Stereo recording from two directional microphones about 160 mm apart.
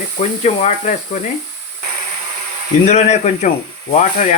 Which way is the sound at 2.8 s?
45° left (ahead or behind).